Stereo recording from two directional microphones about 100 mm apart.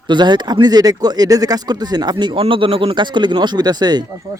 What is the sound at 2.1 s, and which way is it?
Speech, 60° right (ahead or behind).